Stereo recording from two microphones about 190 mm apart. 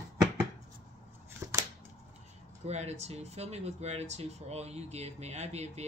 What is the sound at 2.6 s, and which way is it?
Speech, 35° right (ahead or behind).